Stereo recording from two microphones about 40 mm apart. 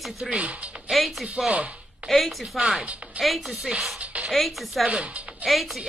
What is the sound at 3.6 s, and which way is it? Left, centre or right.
Speech, centre.